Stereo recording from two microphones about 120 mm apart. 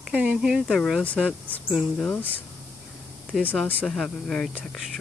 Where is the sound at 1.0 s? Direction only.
10° left (ahead or behind).